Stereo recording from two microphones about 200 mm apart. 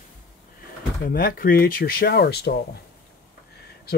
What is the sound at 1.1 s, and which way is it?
Speech, 45° left (ahead or behind).